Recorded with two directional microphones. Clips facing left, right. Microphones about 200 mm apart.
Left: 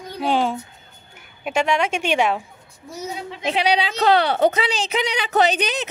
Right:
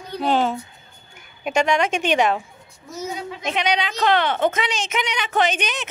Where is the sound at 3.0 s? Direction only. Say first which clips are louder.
Left 1 dB; 30° left (ahead or behind).